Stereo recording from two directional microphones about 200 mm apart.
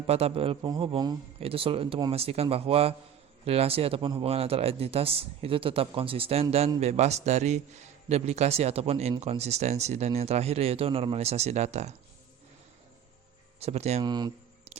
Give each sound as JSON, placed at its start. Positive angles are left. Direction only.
{"t": 0.1, "sound": "a man's voice", "side_deg": -30}
{"t": 13.6, "sound": "speech", "side_deg": -30}
{"t": 14.0, "sound": "a man's voice", "side_deg": -20}